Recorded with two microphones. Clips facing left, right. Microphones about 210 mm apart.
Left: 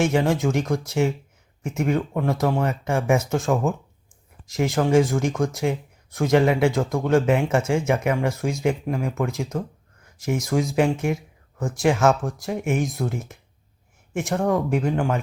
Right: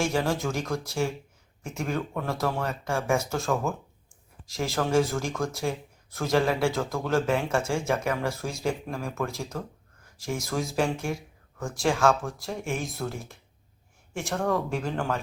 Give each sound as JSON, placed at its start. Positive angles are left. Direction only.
{"t": 0.0, "sound": "speech", "side_deg": 20}